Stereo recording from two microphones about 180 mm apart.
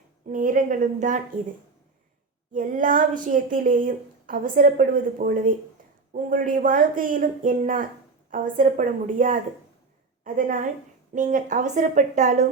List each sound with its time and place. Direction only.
0.3 s a woman's voice: 50° right (ahead or behind)
2.5 s a woman's voice: 50° right (ahead or behind)